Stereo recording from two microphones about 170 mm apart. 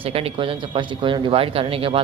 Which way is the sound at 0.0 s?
35° right (ahead or behind).